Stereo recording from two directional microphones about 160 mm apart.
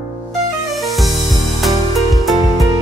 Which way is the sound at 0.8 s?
Centre (ahead or behind).